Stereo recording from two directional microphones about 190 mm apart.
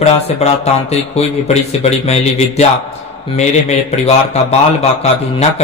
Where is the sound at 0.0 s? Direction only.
35° left (ahead or behind).